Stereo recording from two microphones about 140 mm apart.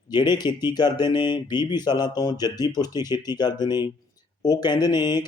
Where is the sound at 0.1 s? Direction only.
30° left (ahead or behind).